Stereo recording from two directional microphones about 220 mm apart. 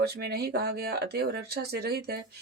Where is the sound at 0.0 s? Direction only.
45° right (ahead or behind).